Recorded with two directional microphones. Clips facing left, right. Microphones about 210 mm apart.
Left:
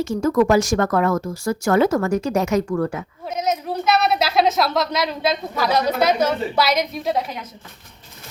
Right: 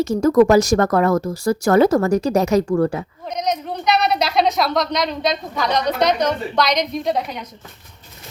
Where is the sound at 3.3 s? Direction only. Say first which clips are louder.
Even; 5° left (ahead or behind).